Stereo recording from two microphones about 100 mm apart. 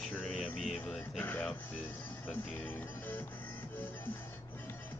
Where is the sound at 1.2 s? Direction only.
20° left (ahead or behind).